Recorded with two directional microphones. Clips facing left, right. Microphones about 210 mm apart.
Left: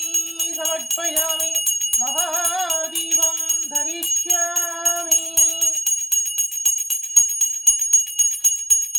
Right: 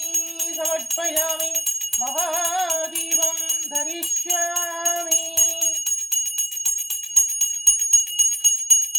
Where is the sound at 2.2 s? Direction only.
15° right (ahead or behind).